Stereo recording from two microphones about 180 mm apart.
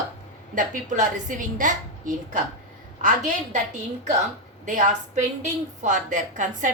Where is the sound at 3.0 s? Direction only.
45° right (ahead or behind).